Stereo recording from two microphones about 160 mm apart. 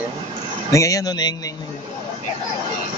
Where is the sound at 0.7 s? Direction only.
20° left (ahead or behind).